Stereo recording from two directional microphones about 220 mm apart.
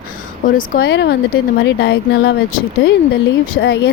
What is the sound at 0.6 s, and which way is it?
Speech, 45° left (ahead or behind).